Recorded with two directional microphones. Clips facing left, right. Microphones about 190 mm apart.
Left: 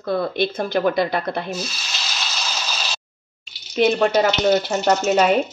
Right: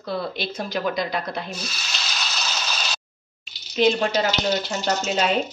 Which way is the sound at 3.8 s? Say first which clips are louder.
Left 3 dB; 55° left (ahead or behind).